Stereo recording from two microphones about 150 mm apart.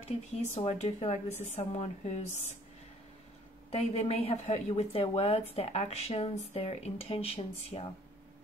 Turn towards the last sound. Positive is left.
turn(degrees=40)  # may be behind; listen again after turning